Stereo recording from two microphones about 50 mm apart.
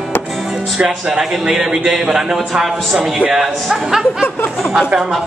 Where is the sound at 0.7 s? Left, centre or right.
Centre.